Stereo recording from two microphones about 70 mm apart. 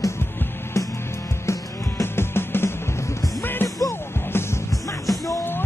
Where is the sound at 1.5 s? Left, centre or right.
Left.